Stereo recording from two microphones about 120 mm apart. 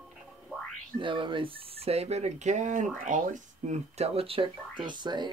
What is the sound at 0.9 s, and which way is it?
Speech, 45° right (ahead or behind).